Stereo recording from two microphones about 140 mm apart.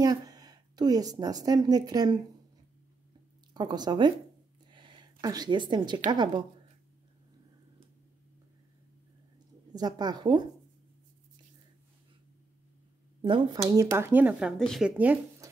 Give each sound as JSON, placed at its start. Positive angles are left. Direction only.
{"t": 0.0, "sound": "a woman's voice", "side_deg": -25}
{"t": 3.5, "sound": "a woman's voice", "side_deg": -30}
{"t": 4.6, "sound": "a sound", "side_deg": -35}
{"t": 5.2, "sound": "a woman's voice", "side_deg": -30}
{"t": 9.7, "sound": "speech", "side_deg": -30}
{"t": 13.2, "sound": "speech", "side_deg": -35}